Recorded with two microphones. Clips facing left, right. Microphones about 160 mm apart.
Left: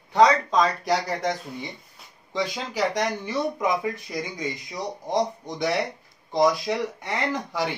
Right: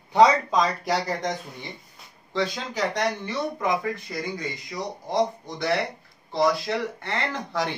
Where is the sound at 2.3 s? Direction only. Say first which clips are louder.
Right 1 dB; 10° left (ahead or behind).